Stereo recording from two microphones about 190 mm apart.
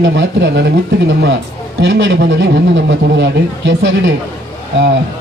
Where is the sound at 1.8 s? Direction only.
70° right (ahead or behind).